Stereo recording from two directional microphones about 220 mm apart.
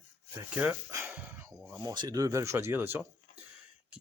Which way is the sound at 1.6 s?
15° right (ahead or behind).